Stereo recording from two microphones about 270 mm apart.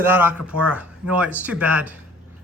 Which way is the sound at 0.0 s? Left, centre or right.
Centre.